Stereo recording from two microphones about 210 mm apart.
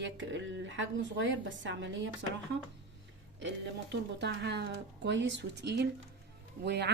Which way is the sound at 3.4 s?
60° right (ahead or behind).